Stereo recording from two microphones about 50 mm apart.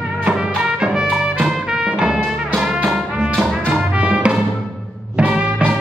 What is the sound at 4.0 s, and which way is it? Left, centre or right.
Music, right.